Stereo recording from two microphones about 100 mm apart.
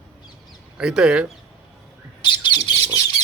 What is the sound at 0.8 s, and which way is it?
Speech, 5° right (ahead or behind).